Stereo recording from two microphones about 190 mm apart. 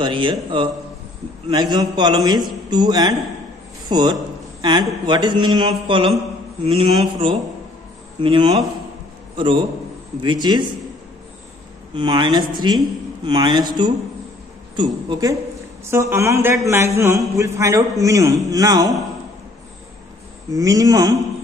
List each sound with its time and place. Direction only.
0.0 s a man's voice: 25° right (ahead or behind)
6.6 s mantra: 30° right (ahead or behind)
8.2 s speech: 25° right (ahead or behind)
11.9 s a man's voice: 25° right (ahead or behind)
20.5 s speech: 20° right (ahead or behind)